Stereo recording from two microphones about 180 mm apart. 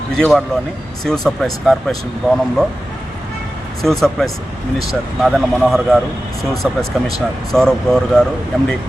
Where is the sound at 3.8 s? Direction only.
Centre (ahead or behind).